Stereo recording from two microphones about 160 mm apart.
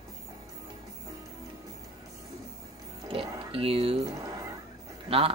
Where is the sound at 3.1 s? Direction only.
35° right (ahead or behind).